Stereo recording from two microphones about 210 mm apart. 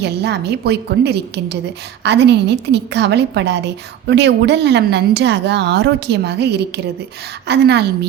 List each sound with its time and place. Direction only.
0.0 s a woman's voice: 50° right (ahead or behind)